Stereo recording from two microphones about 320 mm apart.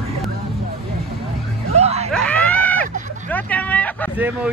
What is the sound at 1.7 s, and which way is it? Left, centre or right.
Screaming, centre.